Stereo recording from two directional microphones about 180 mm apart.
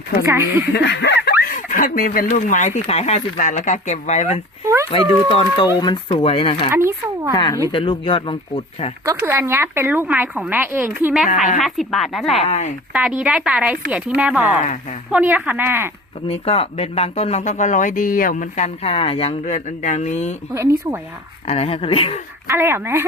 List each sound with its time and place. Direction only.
0.7 s speech: 70° left (ahead or behind); by 4.4 s 40° left (ahead or behind)
4.6 s a sound: 15° right (ahead or behind)
5.3 s speech: 25° left (ahead or behind)
6.7 s speech: 15° right (ahead or behind)
7.3 s speech: 25° left (ahead or behind)
9.2 s a woman's voice: 15° right (ahead or behind)
12.4 s speech: 40° left (ahead or behind)
12.9 s speech: 5° right (ahead or behind)
14.6 s speech: 40° left (ahead or behind)
15.1 s speech: 10° right (ahead or behind)
16.3 s speech: 35° left (ahead or behind)
20.5 s speech: 15° right (ahead or behind)
21.4 s speech: 30° left (ahead or behind)
22.4 s speech: 15° right (ahead or behind)